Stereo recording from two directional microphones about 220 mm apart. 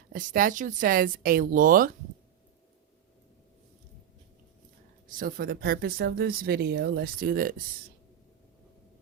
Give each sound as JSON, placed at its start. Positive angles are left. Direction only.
{"t": 0.1, "sound": "speech", "side_deg": -40}
{"t": 5.0, "sound": "speech", "side_deg": -40}